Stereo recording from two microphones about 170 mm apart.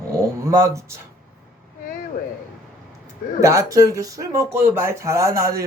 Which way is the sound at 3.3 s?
20° right (ahead or behind).